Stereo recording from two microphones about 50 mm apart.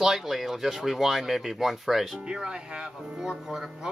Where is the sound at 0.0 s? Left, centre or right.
Centre.